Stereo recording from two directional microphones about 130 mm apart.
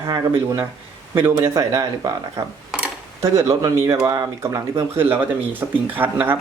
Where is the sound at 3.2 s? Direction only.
25° right (ahead or behind).